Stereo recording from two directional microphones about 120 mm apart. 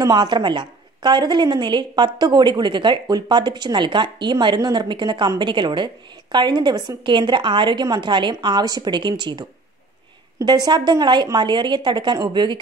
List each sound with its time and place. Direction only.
0.0 s a woman's voice: 35° right (ahead or behind)